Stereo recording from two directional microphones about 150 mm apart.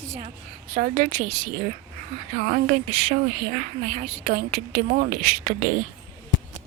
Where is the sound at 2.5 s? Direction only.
70° right (ahead or behind).